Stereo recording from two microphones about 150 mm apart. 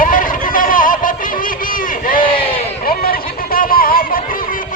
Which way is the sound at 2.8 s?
75° left (ahead or behind).